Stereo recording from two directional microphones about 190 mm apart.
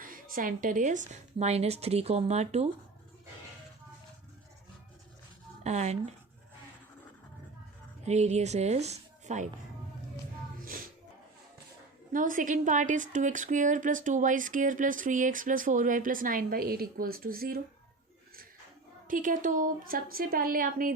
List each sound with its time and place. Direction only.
0.0 s a woman's voice: 45° right (ahead or behind)
5.6 s a woman's voice: 35° right (ahead or behind)
8.0 s a woman's voice: 35° right (ahead or behind)
12.1 s a woman's voice: 45° right (ahead or behind)
19.0 s a woman's voice: 45° right (ahead or behind)